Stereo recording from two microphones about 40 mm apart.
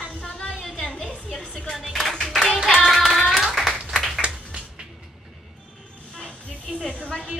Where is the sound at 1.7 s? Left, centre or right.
Centre.